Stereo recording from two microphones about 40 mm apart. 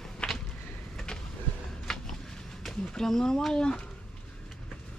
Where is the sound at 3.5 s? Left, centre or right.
Left.